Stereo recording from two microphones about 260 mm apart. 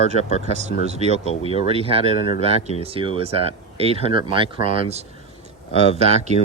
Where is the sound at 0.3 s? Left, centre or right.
Right.